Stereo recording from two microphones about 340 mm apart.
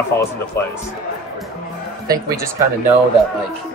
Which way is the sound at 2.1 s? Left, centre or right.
Centre.